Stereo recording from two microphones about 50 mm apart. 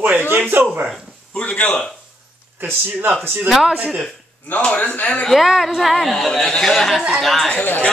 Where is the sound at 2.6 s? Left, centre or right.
Right.